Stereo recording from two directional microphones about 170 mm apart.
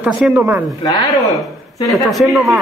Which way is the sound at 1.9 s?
Centre (ahead or behind).